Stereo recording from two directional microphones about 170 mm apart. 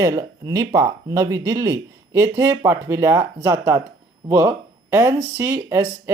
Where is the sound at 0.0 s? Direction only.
20° right (ahead or behind).